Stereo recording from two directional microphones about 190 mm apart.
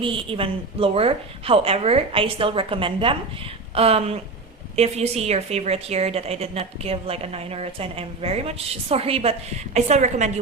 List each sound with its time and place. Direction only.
0.3 s a woman's voice: 30° right (ahead or behind)